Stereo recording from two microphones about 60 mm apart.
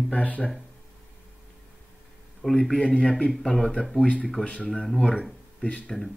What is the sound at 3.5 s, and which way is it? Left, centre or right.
Speech, centre.